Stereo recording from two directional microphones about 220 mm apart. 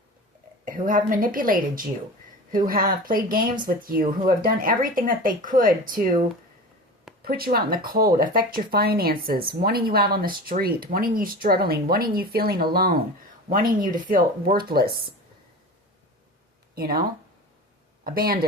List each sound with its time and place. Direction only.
0.6 s speech: 40° right (ahead or behind)
16.7 s speech: 45° right (ahead or behind)
18.0 s speech: 40° right (ahead or behind)